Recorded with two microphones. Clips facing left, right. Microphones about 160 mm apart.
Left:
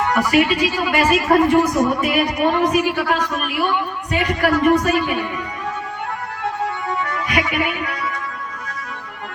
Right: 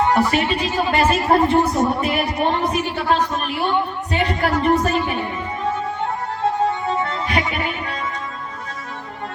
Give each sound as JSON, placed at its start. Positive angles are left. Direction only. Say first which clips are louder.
{"t": 0.0, "sound": "speech", "louder": "left 1 dB", "side_deg": -30}
{"t": 6.4, "sound": "music", "louder": "right 5 dB", "side_deg": -25}